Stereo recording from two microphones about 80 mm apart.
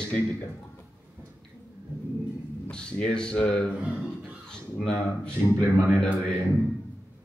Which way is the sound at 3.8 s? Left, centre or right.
Centre.